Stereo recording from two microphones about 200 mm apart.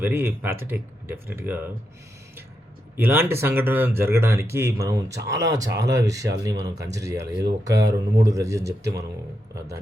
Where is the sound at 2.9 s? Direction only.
10° right (ahead or behind).